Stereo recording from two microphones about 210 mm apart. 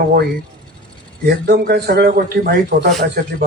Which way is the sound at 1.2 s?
50° right (ahead or behind).